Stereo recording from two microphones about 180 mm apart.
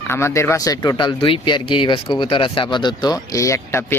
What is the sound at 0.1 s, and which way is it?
Speech, 15° left (ahead or behind).